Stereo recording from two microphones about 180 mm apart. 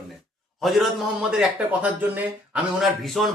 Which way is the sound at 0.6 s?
Centre (ahead or behind).